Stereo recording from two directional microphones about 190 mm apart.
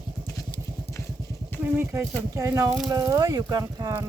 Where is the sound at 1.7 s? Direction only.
15° right (ahead or behind).